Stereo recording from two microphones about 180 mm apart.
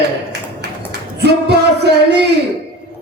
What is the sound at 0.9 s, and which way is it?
Music, 65° right (ahead or behind).